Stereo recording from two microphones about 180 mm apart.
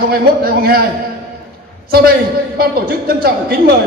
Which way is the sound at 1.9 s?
60° right (ahead or behind).